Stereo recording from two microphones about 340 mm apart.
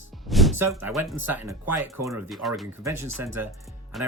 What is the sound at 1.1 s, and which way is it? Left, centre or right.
Speech, right.